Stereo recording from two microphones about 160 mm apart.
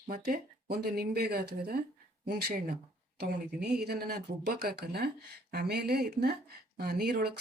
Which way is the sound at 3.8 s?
70° right (ahead or behind).